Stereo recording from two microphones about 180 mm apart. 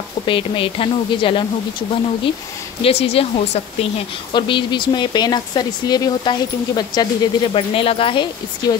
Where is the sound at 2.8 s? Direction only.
35° left (ahead or behind).